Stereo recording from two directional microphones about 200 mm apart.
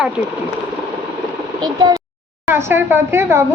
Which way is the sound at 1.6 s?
20° right (ahead or behind).